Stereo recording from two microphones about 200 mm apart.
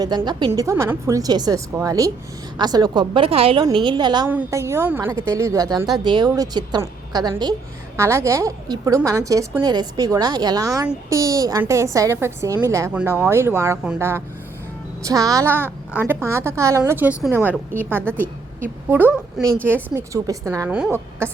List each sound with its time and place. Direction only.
0.0 s a woman's voice: 20° right (ahead or behind)
4.3 s a woman's voice: 10° right (ahead or behind)